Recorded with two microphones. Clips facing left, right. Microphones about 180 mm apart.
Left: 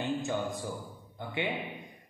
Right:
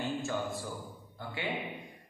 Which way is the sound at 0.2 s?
15° left (ahead or behind).